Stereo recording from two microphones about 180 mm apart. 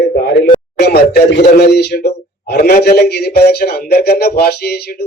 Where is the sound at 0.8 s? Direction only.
65° left (ahead or behind).